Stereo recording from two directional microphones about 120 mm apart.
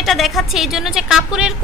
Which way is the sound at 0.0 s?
Centre (ahead or behind).